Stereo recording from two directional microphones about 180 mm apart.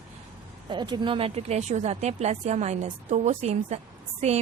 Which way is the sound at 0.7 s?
25° right (ahead or behind).